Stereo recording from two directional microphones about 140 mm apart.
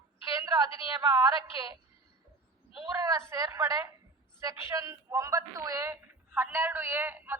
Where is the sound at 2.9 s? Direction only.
25° right (ahead or behind).